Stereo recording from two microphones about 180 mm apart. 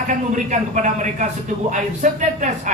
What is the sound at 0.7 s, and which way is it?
A man's voice, 45° right (ahead or behind).